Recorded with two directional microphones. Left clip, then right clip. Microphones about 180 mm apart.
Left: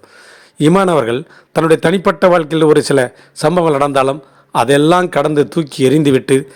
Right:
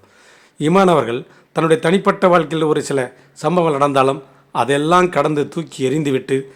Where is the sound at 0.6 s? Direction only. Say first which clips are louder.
Left 2 dB; 30° left (ahead or behind).